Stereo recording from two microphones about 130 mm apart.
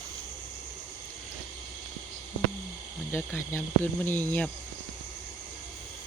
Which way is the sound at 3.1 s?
15° left (ahead or behind).